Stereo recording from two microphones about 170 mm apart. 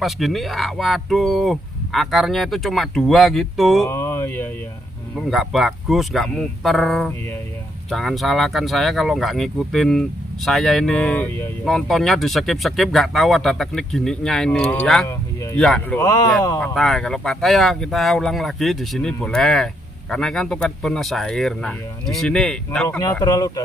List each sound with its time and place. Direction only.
0.0 s speech: centre (ahead or behind)
3.8 s speech: 15° left (ahead or behind)
5.3 s speech: centre (ahead or behind)
16.0 s speech: 20° left (ahead or behind)
16.6 s speech: centre (ahead or behind)
22.8 s speech: 20° left (ahead or behind)